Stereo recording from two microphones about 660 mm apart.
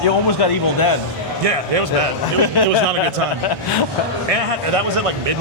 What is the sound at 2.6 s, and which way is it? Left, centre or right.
Speech, left.